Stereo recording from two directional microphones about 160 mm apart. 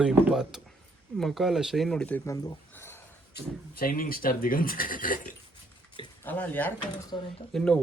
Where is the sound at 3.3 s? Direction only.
65° left (ahead or behind).